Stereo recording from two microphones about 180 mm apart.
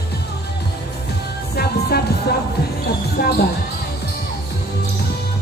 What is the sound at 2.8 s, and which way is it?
Basketball bounce, 60° left (ahead or behind).